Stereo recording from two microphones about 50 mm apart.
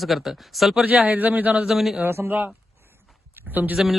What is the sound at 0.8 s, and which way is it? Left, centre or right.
Speech, right.